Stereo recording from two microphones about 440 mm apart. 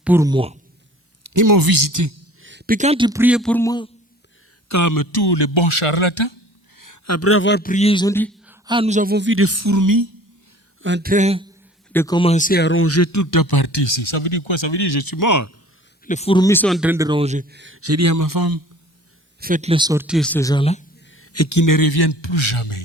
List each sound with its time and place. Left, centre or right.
0.0 s speech: centre
1.2 s speech: right
2.4 s a man's voice: right; by 3.8 s centre
4.7 s a man's voice: left
6.7 s a man's voice: left; by 8.5 s centre
8.6 s speech: centre; by 10.1 s right
10.8 s speech: right
11.9 s a man's voice: centre; by 15.5 s left
16.0 s speech: centre; by 18.6 s right
19.4 s speech: centre
21.1 s a man's voice: left